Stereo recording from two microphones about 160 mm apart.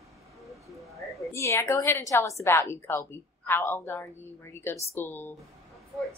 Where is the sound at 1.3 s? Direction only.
15° left (ahead or behind).